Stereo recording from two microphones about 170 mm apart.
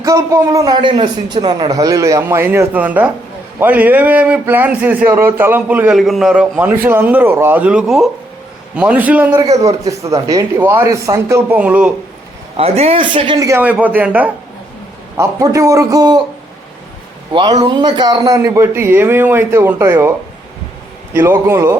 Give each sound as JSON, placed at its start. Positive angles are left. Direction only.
{"t": 0.0, "sound": "a man's voice", "side_deg": -20}
{"t": 9.3, "sound": "a man's voice", "side_deg": -20}
{"t": 12.5, "sound": "speech", "side_deg": -35}
{"t": 13.6, "sound": "a man's voice", "side_deg": -10}
{"t": 17.3, "sound": "a man's voice", "side_deg": -25}